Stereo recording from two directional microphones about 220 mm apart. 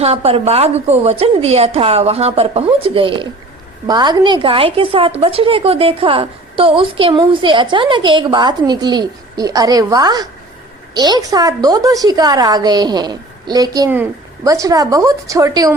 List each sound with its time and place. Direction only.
0.0 s a woman's voice: 25° right (ahead or behind)